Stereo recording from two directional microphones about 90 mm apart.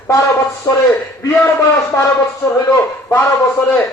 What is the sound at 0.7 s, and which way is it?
Speech, 40° left (ahead or behind).